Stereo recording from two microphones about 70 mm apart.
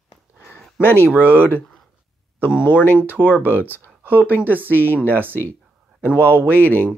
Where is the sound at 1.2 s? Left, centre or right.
Left.